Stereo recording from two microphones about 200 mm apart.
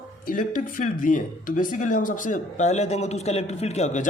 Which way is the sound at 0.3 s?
40° left (ahead or behind).